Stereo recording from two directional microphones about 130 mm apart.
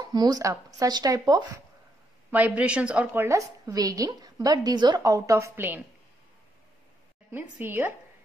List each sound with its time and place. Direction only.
0.0 s a woman's voice: 30° right (ahead or behind)
2.3 s a woman's voice: 10° right (ahead or behind)
7.2 s a woman's voice: 15° right (ahead or behind)